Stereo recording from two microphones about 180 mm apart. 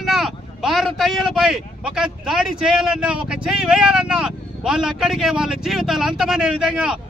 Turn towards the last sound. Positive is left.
turn(degrees=-5)  # may be behind; listen again after turning